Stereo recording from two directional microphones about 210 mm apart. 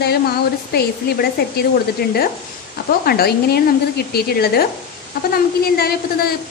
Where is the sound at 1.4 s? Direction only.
50° left (ahead or behind).